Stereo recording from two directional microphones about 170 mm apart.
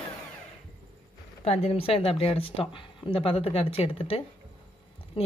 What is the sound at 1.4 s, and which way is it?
Speech, 35° left (ahead or behind).